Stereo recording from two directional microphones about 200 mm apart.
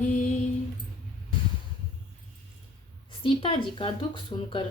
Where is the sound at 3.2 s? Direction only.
25° left (ahead or behind).